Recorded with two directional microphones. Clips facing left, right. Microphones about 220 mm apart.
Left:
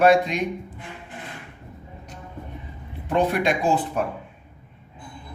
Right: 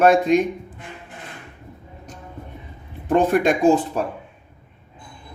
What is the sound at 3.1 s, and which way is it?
Speech, 45° right (ahead or behind).